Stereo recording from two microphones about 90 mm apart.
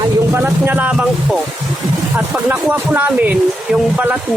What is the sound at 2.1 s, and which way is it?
Speech, 20° right (ahead or behind).